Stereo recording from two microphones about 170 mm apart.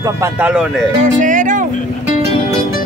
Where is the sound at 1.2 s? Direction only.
50° right (ahead or behind).